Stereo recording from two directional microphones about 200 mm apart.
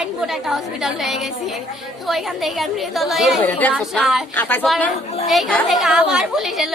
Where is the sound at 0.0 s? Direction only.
Centre (ahead or behind).